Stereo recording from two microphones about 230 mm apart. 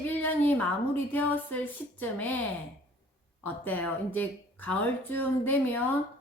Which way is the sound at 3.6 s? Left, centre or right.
Centre.